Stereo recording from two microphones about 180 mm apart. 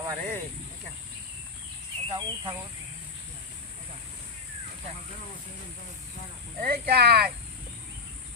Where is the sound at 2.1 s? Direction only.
20° right (ahead or behind).